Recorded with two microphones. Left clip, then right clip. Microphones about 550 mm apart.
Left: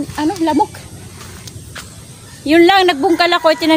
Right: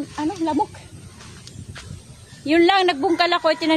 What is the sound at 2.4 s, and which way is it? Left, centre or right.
A woman's voice, right.